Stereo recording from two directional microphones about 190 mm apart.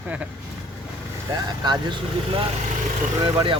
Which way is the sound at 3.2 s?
25° right (ahead or behind).